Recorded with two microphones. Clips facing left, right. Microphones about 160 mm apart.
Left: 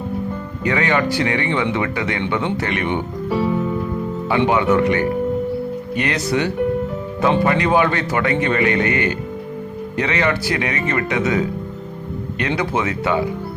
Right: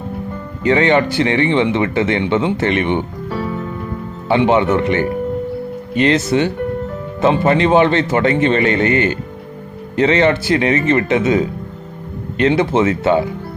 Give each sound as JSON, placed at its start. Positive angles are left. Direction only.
{"t": 0.6, "sound": "speech", "side_deg": -25}
{"t": 3.2, "sound": "music", "side_deg": 5}
{"t": 4.3, "sound": "speech", "side_deg": -25}